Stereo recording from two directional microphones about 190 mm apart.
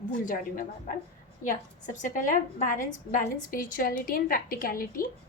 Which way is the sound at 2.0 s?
45° left (ahead or behind).